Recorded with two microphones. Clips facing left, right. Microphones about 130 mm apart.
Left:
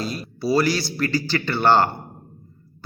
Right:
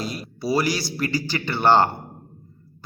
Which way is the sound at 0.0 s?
20° right (ahead or behind).